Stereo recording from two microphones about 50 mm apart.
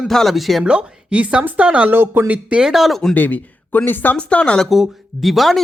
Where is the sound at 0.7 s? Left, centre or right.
Right.